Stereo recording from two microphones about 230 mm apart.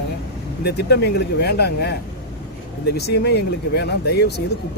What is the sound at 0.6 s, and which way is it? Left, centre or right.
Speech, left.